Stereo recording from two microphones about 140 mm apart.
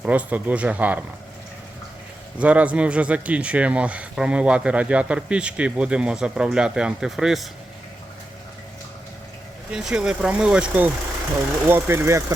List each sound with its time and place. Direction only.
0.0 s speech: 10° right (ahead or behind)
2.4 s speech: 10° right (ahead or behind)
9.7 s speech: 5° right (ahead or behind)